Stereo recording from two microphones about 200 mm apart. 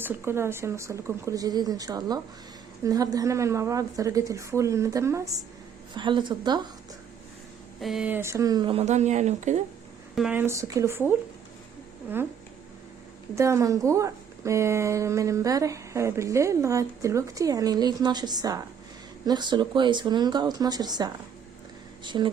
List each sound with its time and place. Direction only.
0.0 s a woman's voice: 10° right (ahead or behind)
7.8 s speech: centre (ahead or behind); by 9.6 s 35° right (ahead or behind)
10.2 s a woman's voice: 5° right (ahead or behind)
13.3 s a woman's voice: 15° right (ahead or behind)